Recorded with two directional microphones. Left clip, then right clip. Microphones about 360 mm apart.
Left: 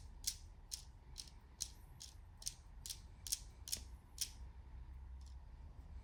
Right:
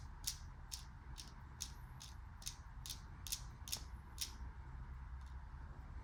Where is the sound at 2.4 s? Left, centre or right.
Centre.